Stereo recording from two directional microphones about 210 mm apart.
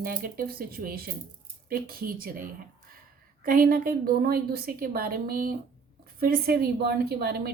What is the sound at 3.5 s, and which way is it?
A woman's voice, 45° right (ahead or behind).